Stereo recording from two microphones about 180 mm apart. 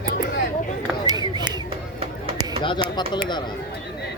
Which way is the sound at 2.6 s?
25° left (ahead or behind).